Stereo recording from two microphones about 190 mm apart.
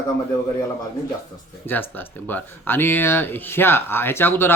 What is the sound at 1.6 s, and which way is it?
Speech, 10° left (ahead or behind).